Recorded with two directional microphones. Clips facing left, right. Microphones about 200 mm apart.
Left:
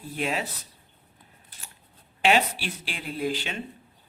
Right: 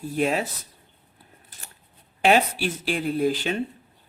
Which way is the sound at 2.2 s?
45° right (ahead or behind).